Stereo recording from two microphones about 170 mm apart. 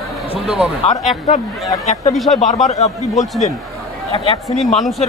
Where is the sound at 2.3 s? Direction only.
45° left (ahead or behind).